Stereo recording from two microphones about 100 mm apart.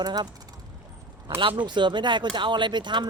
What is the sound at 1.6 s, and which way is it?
Speech, 50° right (ahead or behind).